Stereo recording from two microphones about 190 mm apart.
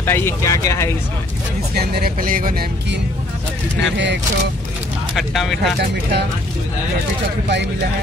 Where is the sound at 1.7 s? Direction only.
55° right (ahead or behind).